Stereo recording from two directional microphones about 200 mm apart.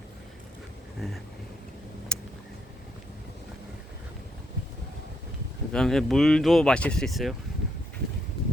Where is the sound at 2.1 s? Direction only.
5° left (ahead or behind).